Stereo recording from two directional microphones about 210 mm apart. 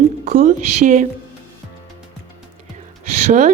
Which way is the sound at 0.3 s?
35° right (ahead or behind).